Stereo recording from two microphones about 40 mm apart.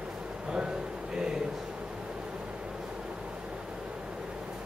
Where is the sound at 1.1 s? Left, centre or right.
Centre.